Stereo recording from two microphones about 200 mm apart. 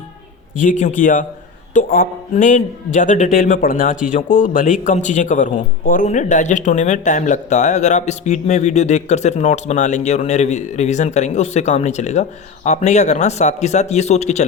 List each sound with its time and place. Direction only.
0.5 s speech: 40° left (ahead or behind)